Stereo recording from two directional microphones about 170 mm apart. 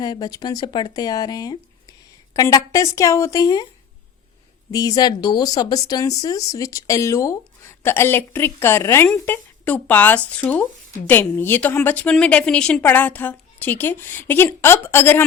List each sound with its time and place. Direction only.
0.0 s speech: 25° left (ahead or behind)
4.7 s speech: 20° left (ahead or behind)